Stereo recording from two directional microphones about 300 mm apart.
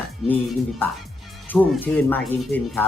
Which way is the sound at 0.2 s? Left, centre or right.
Centre.